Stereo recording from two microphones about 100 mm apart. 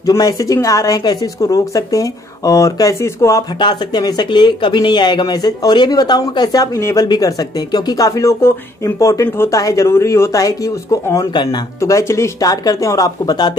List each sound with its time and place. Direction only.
0.0 s speech: 40° left (ahead or behind)
3.5 s speech: 50° left (ahead or behind)
6.8 s speech: 30° left (ahead or behind)
7.1 s speech: 40° left (ahead or behind)